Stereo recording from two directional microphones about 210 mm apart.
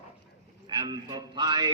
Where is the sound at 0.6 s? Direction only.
20° right (ahead or behind).